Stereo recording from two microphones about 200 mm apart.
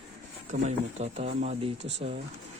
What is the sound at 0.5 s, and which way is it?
Speech, 40° right (ahead or behind).